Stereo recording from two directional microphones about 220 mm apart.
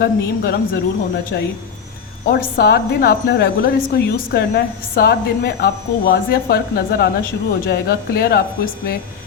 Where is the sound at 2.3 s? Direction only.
45° left (ahead or behind).